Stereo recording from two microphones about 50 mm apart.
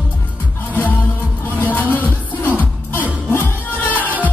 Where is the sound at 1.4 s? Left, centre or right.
Left.